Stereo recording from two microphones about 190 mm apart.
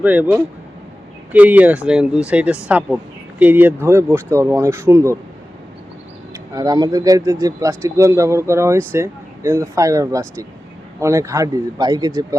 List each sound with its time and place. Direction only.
0.0 s speech: 10° right (ahead or behind)
6.5 s speech: 20° right (ahead or behind)